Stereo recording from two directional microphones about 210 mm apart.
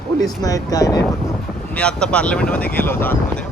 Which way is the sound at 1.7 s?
5° left (ahead or behind).